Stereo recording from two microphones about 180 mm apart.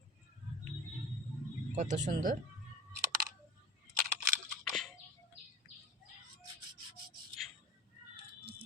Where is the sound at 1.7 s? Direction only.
40° right (ahead or behind).